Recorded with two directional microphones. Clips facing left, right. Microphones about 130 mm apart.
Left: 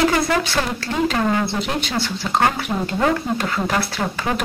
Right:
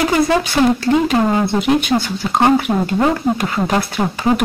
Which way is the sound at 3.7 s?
25° right (ahead or behind).